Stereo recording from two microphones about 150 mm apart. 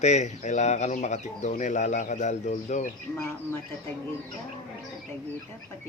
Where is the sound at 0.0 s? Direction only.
50° left (ahead or behind).